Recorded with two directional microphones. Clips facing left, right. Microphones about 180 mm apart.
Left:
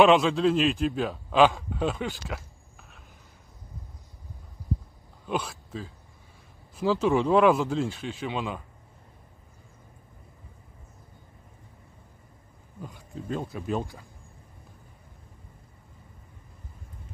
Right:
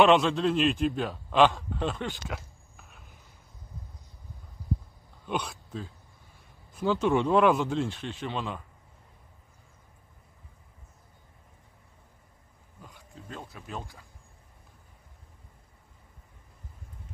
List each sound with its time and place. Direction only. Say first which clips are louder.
0.0 s a man's voice: left 2 dB; centre (ahead or behind)
5.2 s speech: left 2 dB; centre (ahead or behind)
13.5 s speech: left 12 dB; 15° left (ahead or behind)